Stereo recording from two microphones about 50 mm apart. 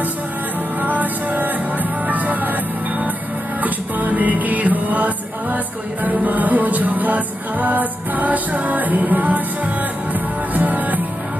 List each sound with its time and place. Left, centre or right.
0.7 s music: right